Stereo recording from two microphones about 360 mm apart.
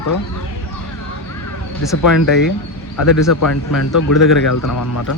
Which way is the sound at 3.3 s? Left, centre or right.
Left.